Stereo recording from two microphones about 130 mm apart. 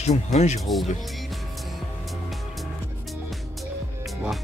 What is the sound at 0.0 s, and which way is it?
Speech, 60° left (ahead or behind).